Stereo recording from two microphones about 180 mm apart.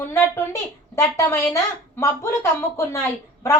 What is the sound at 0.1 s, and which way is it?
Speech, 15° left (ahead or behind).